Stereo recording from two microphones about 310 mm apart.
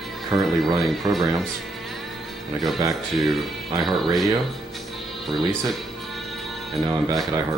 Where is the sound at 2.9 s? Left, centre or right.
Centre.